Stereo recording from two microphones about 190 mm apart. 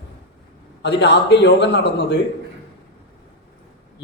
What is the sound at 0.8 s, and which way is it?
A man's voice, 65° left (ahead or behind).